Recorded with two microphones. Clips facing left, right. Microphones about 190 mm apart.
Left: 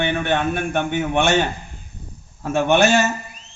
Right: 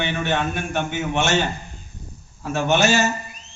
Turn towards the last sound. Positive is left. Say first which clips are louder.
# left 3 dB
turn(degrees=55)  # may be behind; listen again after turning